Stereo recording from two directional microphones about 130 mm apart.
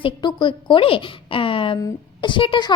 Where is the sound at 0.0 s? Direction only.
35° left (ahead or behind).